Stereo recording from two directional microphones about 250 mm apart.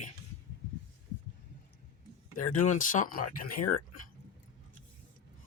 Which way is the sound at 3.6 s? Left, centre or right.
Left.